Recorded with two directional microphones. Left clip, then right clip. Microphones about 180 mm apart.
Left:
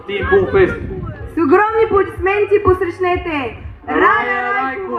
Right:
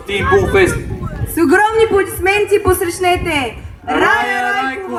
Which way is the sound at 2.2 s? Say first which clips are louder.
Right 1 dB; 45° right (ahead or behind).